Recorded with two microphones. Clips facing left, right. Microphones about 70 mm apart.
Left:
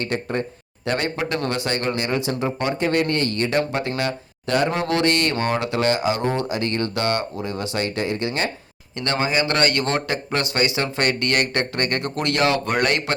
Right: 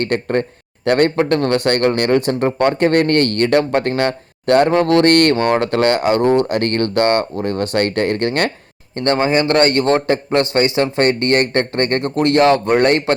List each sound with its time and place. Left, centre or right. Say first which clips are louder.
0.0 s speech: right 7 dB; right
1.1 s speech: right 9 dB; right
9.0 s a man's voice: right 7 dB; right